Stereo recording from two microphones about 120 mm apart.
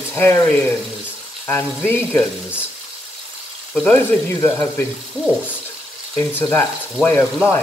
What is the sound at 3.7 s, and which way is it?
Speech, 15° left (ahead or behind).